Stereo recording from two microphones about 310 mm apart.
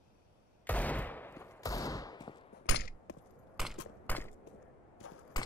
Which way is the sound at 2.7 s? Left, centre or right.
Left.